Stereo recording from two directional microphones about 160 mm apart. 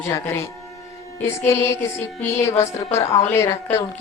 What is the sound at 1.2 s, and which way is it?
Speech, 15° left (ahead or behind).